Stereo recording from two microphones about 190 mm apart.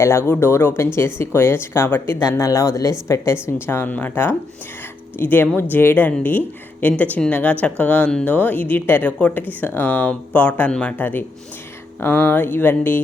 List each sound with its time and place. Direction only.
0.0 s speech: 15° left (ahead or behind)